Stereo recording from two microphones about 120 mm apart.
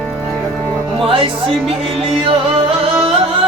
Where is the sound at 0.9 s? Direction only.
50° right (ahead or behind).